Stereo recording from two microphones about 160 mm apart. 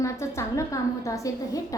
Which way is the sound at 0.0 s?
20° left (ahead or behind).